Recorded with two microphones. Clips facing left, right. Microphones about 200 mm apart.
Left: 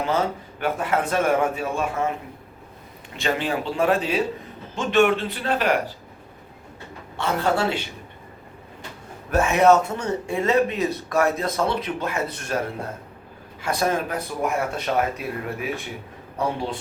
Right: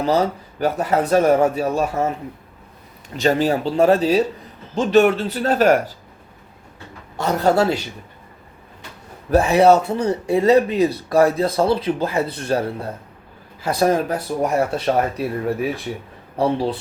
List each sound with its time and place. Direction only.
0.0 s speech: 40° right (ahead or behind)
3.2 s speech: 40° right (ahead or behind)
7.2 s speech: 40° right (ahead or behind)
9.3 s speech: 35° right (ahead or behind)